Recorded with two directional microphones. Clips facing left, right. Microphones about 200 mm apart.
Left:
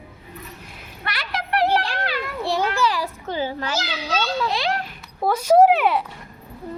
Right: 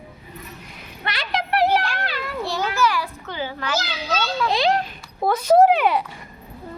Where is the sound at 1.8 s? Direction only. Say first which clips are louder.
Left 1 dB; 35° left (ahead or behind).